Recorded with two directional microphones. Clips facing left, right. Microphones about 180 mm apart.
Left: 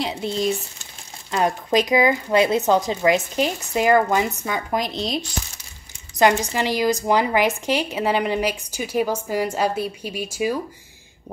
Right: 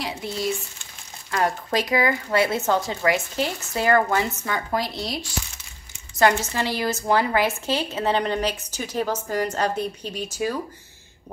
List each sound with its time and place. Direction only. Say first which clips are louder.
0.0 s a woman's voice: left 4 dB; 25° left (ahead or behind)